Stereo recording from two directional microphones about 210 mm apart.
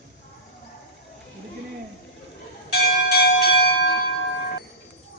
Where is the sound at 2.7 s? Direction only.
50° left (ahead or behind).